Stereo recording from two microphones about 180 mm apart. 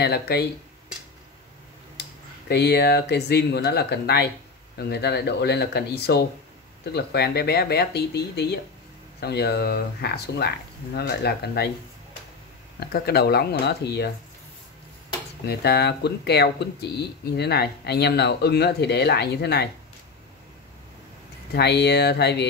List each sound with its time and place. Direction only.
0.0 s speech: 65° left (ahead or behind)
2.0 s speech: 70° left (ahead or behind)
12.8 s speech: 60° left (ahead or behind)
15.4 s speech: 65° left (ahead or behind)
21.5 s speech: 65° left (ahead or behind)